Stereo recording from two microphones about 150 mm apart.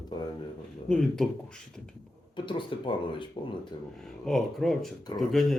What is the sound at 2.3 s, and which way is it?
Speech, 30° left (ahead or behind).